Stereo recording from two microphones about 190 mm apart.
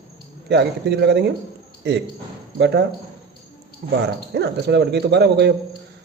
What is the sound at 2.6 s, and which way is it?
Speech, 60° right (ahead or behind).